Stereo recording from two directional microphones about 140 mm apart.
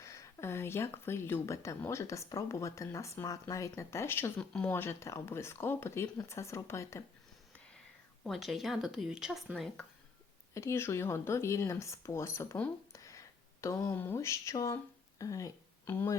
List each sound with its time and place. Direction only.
0.0 s speech: 20° left (ahead or behind)
8.2 s speech: centre (ahead or behind)
10.5 s speech: 20° left (ahead or behind)
12.9 s a sound: 20° left (ahead or behind)
13.9 s speech: 15° left (ahead or behind)